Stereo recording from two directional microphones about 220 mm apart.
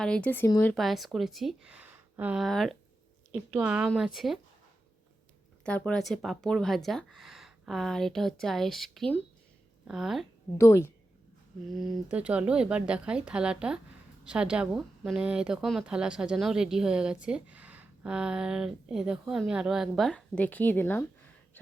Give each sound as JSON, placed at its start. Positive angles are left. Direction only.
{"t": 0.0, "sound": "speech", "side_deg": 5}
{"t": 5.6, "sound": "speech", "side_deg": 5}
{"t": 10.6, "sound": "a woman's voice", "side_deg": 10}
{"t": 11.6, "sound": "speech", "side_deg": 0}